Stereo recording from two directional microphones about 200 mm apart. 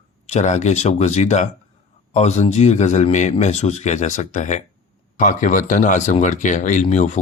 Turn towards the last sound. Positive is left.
turn(degrees=35)  # may be behind; listen again after turning